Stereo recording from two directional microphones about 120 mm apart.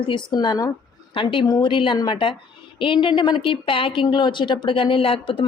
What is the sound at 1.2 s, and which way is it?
Speech, 45° left (ahead or behind).